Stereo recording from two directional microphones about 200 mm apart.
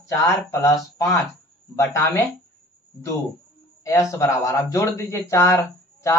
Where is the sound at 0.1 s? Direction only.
15° left (ahead or behind).